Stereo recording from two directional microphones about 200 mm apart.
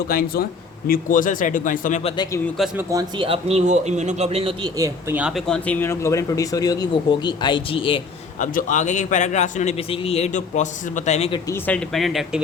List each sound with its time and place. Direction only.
0.1 s a man's voice: 45° left (ahead or behind)
2.6 s speech: centre (ahead or behind)
2.9 s speech: 20° right (ahead or behind); by 8.0 s 25° left (ahead or behind)
8.4 s a man's voice: 40° left (ahead or behind)
11.4 s speech: 10° left (ahead or behind)